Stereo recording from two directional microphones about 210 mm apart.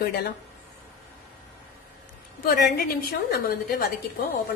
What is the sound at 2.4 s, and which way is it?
A woman's voice, 45° left (ahead or behind).